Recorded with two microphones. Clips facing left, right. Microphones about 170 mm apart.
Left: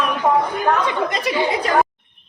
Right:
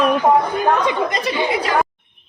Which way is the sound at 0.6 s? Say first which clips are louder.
Right 2 dB; 20° right (ahead or behind).